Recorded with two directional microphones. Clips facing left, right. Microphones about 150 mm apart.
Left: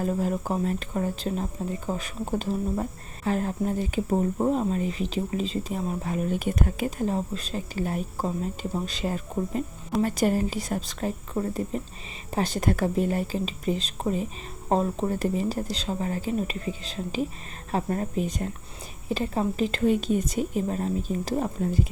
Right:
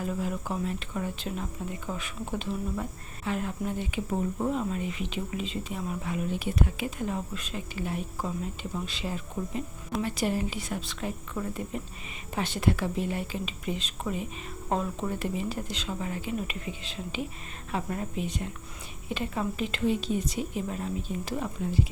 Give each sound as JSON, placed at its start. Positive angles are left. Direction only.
{"t": 0.0, "sound": "speech", "side_deg": 40}